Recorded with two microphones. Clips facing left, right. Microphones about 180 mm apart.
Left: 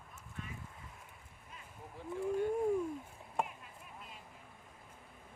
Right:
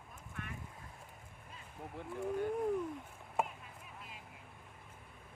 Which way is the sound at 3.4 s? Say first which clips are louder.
Right 1 dB; 5° right (ahead or behind).